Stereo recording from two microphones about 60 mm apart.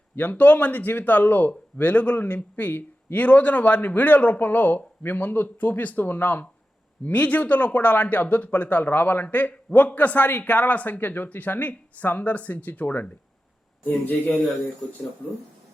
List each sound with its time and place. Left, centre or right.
0.2 s speech: left